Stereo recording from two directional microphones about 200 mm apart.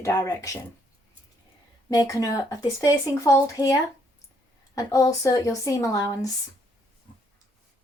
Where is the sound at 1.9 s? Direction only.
15° left (ahead or behind).